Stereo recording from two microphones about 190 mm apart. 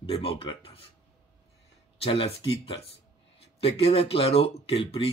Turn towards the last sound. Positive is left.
turn(degrees=30)  # may be behind; listen again after turning